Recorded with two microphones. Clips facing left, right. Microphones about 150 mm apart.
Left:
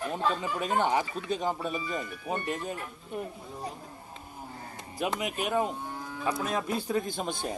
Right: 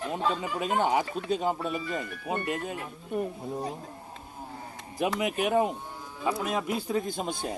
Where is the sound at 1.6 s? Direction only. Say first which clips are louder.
Right 1 dB; 60° right (ahead or behind).